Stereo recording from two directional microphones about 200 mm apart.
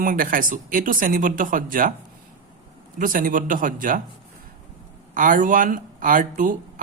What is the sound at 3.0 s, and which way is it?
Speech, 45° right (ahead or behind).